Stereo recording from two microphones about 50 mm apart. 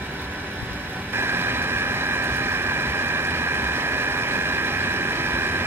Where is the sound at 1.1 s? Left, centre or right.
Right.